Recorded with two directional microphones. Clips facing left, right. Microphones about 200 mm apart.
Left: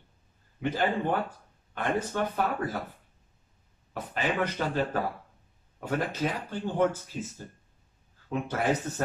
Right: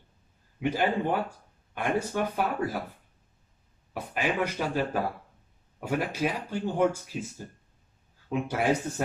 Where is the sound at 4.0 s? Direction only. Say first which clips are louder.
Right 1 dB; 10° right (ahead or behind).